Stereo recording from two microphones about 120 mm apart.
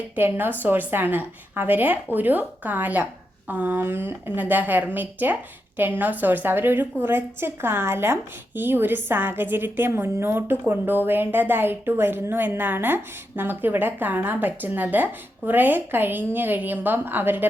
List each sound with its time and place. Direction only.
0.2 s a woman's voice: 15° right (ahead or behind)